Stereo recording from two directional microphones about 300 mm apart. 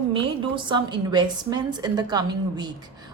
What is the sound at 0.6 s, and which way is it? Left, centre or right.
A woman's voice, centre.